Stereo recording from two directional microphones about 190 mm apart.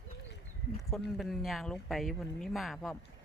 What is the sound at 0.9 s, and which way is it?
Speech, centre (ahead or behind).